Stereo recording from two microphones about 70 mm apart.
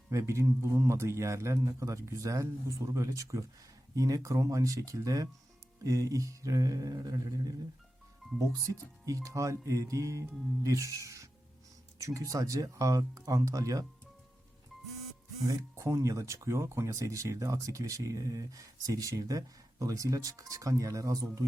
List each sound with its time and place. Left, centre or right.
0.1 s speech: right
5.8 s mantra: right
8.4 s speech: right
15.7 s speech: right